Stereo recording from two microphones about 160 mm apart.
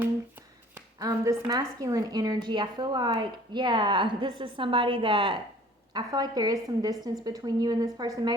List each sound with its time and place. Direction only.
0.9 s a woman's voice: 20° right (ahead or behind)